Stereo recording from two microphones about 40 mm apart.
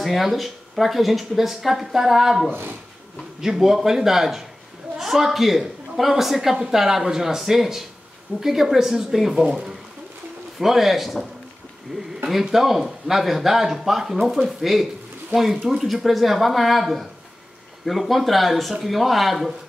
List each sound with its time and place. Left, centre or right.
0.0 s speech: centre
2.5 s speech: right
3.3 s speech: centre